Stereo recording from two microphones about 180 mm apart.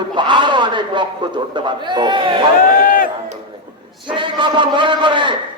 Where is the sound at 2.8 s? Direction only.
50° left (ahead or behind).